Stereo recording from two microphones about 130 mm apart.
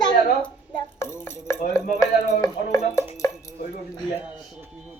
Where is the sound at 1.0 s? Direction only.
20° left (ahead or behind).